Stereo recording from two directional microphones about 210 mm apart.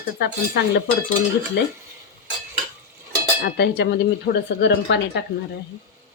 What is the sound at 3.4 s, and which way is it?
Speech, 50° left (ahead or behind).